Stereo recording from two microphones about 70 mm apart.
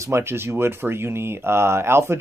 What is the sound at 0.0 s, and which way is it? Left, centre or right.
Speech, right.